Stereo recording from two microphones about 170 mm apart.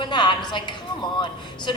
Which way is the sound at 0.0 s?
25° left (ahead or behind).